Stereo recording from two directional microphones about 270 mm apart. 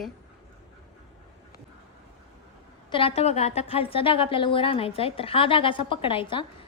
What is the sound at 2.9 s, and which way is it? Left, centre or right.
A woman's voice, centre.